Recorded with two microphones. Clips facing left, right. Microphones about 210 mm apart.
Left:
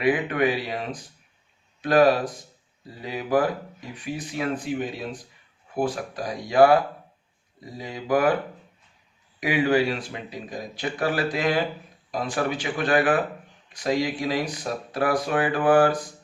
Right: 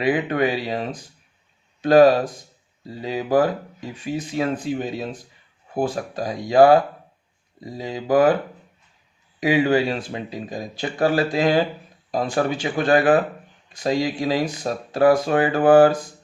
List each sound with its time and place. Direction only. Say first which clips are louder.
0.0 s speech: right 2 dB; 30° right (ahead or behind)
9.4 s speech: right 3 dB; 25° right (ahead or behind)